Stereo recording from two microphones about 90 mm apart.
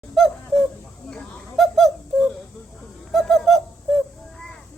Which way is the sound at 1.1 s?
Centre (ahead or behind).